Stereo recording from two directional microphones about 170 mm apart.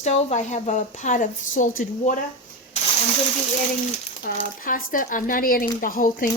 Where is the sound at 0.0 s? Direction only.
45° left (ahead or behind).